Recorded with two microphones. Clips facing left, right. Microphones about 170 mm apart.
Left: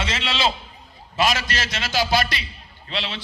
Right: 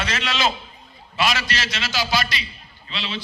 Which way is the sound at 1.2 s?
45° left (ahead or behind).